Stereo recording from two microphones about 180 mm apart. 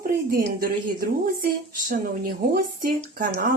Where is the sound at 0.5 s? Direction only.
55° right (ahead or behind).